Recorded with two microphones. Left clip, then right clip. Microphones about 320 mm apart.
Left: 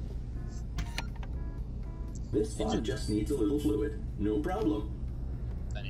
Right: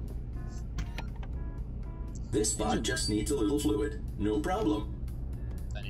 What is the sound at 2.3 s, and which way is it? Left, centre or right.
Speech, right.